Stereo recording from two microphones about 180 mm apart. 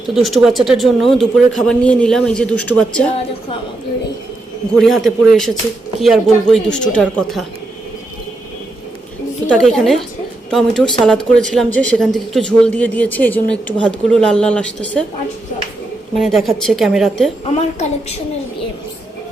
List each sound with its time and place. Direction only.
0.1 s a woman's voice: centre (ahead or behind)
4.7 s a woman's voice: 5° left (ahead or behind)
9.5 s a woman's voice: 5° left (ahead or behind)
16.1 s a woman's voice: centre (ahead or behind)
17.4 s a woman's voice: 40° left (ahead or behind)